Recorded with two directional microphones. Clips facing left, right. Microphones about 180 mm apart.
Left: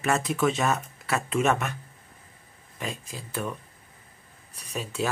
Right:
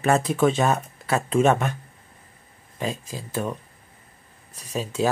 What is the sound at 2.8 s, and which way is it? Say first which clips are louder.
Speech: right 6 dB; 35° right (ahead or behind).